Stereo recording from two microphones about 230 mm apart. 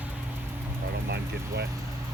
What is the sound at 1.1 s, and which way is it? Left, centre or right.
Speech, right.